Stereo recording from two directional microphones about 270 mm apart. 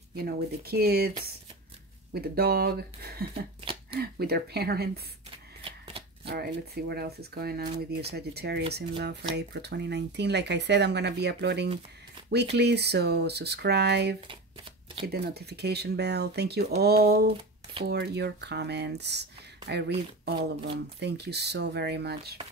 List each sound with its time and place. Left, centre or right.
0.1 s speech: right
2.1 s speech: right
5.6 s shuffling cards: centre
6.2 s speech: right
14.2 s shuffling cards: centre
15.1 s speech: right